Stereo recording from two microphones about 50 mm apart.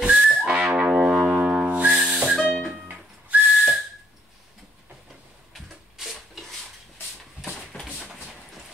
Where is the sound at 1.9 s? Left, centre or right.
Centre.